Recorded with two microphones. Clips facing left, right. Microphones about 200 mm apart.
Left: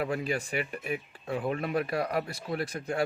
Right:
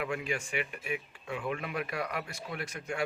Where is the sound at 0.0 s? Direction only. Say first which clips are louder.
Left 4 dB; 35° left (ahead or behind).